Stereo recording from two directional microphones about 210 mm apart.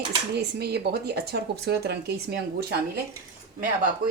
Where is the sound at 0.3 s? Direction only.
50° right (ahead or behind).